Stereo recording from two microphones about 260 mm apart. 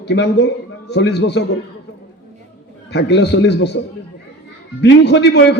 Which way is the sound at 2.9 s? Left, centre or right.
Left.